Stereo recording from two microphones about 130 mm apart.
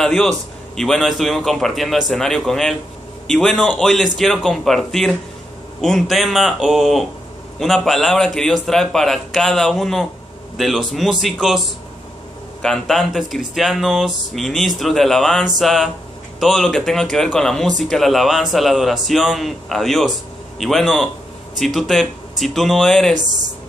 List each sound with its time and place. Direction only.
0.0 s speech: 5° left (ahead or behind)
12.6 s speech: 5° left (ahead or behind)